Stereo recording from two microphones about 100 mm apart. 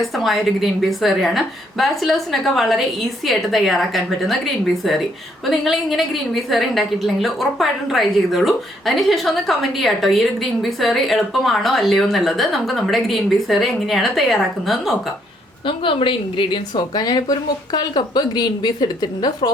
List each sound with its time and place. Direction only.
0.2 s a woman's voice: centre (ahead or behind)
5.5 s a woman's voice: centre (ahead or behind)
15.6 s a woman's voice: 60° left (ahead or behind)